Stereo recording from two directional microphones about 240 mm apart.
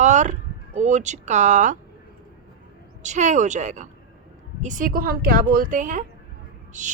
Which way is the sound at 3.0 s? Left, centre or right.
Right.